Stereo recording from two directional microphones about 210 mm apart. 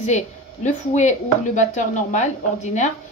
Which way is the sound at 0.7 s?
35° left (ahead or behind).